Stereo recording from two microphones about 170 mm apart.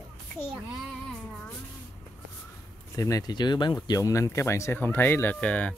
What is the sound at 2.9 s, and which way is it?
Speech, 20° left (ahead or behind).